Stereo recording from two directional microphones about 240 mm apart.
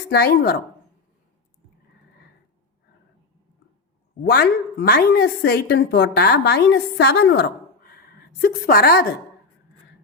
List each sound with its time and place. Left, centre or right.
0.1 s a woman's voice: left
4.2 s a woman's voice: left